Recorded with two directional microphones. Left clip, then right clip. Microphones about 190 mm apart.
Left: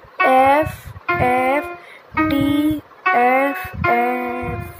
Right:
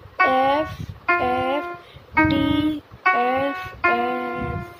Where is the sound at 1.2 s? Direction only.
50° left (ahead or behind).